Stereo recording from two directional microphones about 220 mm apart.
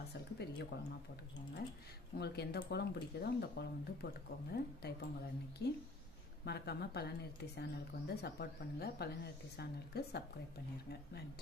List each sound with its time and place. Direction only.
0.1 s speech: 50° left (ahead or behind)
2.1 s speech: 45° left (ahead or behind)